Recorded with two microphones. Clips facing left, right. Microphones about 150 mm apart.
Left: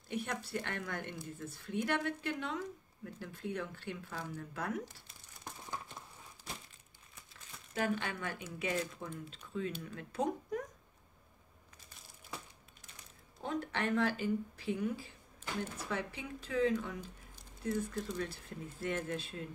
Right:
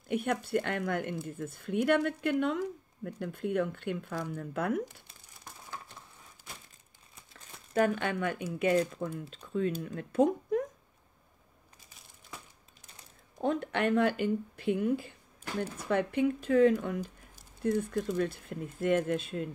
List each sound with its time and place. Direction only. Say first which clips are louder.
0.1 s speech: right 9 dB; 55° right (ahead or behind)
7.9 s speech: right 6 dB; 60° right (ahead or behind)
8.7 s speech: right 9 dB; 35° right (ahead or behind)
13.4 s speech: right 7 dB; 55° right (ahead or behind)